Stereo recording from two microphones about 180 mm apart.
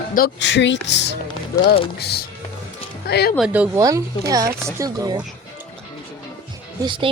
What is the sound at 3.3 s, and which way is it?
Speech, 5° right (ahead or behind).